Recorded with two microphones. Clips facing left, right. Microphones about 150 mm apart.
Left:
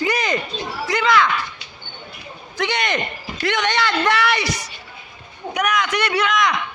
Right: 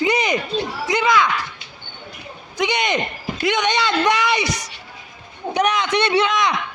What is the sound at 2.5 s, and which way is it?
A man's voice, 15° right (ahead or behind).